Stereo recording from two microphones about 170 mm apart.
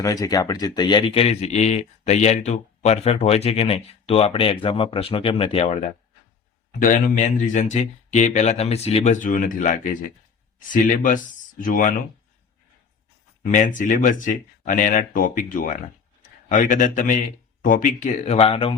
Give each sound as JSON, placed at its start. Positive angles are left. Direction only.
{"t": 0.0, "sound": "speech", "side_deg": 20}
{"t": 6.7, "sound": "speech", "side_deg": 50}
{"t": 13.4, "sound": "speech", "side_deg": 50}